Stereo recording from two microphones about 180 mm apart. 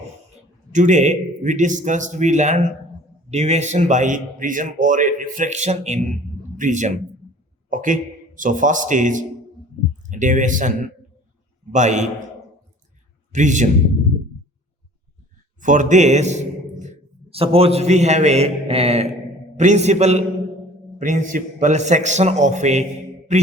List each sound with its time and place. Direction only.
0.7 s a man's voice: 40° right (ahead or behind)
13.3 s a man's voice: 45° right (ahead or behind)
15.6 s a man's voice: 45° right (ahead or behind)